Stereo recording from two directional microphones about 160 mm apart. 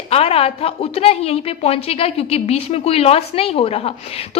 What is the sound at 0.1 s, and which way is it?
A woman's voice, 40° left (ahead or behind).